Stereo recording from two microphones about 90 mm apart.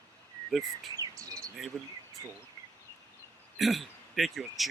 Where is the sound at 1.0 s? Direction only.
40° right (ahead or behind).